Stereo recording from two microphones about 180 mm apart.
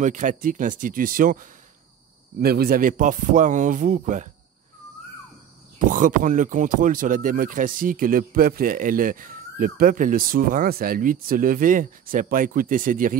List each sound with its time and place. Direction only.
0.0 s speech: 45° right (ahead or behind)
5.9 s speech: 45° right (ahead or behind)